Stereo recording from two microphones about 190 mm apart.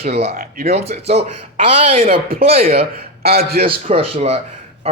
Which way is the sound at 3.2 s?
55° right (ahead or behind).